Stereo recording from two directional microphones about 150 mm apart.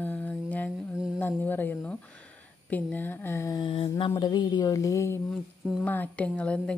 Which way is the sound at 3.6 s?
35° left (ahead or behind).